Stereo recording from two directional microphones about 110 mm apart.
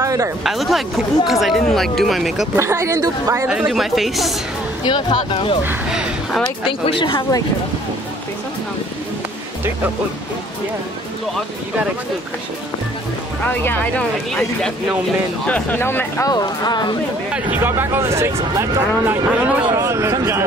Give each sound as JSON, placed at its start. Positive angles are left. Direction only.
{"t": 0.0, "sound": "a sound", "side_deg": -30}
{"t": 0.4, "sound": "speech", "side_deg": 0}
{"t": 2.5, "sound": "speech", "side_deg": -25}
{"t": 3.4, "sound": "speech", "side_deg": -5}
{"t": 4.8, "sound": "speech", "side_deg": 40}
{"t": 5.9, "sound": "speech", "side_deg": -5}
{"t": 6.9, "sound": "speech", "side_deg": 45}
{"t": 13.4, "sound": "speech", "side_deg": 15}
{"t": 16.3, "sound": "speech", "side_deg": 40}
{"t": 17.3, "sound": "speech", "side_deg": -15}